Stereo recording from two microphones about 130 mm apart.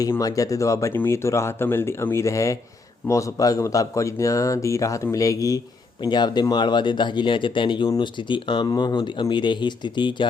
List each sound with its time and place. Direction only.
0.0 s speech: 25° left (ahead or behind)